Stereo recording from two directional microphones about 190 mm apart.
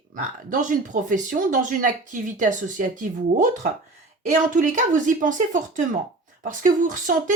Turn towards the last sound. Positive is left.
turn(degrees=-40)  # may be behind; listen again after turning